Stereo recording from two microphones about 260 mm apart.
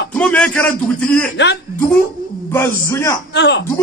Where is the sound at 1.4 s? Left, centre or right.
Left.